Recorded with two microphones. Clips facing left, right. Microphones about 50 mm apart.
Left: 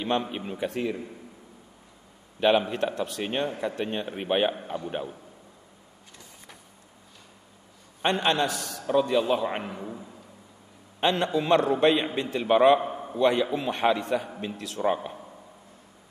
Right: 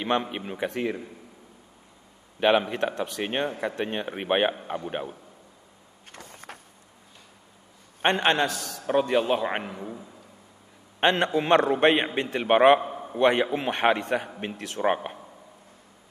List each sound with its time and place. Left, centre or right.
0.0 s a man's voice: right
2.4 s a man's voice: right
6.1 s vehicle: right
8.0 s a man's voice: right
11.0 s a man's voice: right
12.8 s a sound: centre
13.2 s a man's voice: right